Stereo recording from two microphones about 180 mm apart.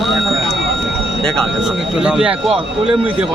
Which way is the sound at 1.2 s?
Centre (ahead or behind).